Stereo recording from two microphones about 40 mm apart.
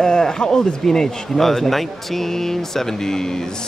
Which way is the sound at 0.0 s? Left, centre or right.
Centre.